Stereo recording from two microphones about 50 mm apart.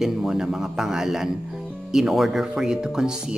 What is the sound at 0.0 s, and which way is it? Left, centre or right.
Speech, centre.